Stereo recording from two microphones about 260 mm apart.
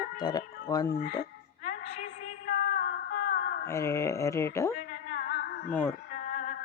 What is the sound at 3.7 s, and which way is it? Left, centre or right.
Speech, centre.